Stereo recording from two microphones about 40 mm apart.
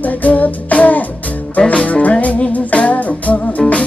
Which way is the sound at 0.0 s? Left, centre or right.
Left.